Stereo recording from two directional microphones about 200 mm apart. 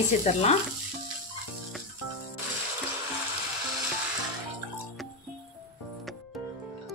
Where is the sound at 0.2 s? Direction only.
35° left (ahead or behind).